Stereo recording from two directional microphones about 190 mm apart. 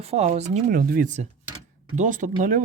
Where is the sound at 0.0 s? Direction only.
35° right (ahead or behind).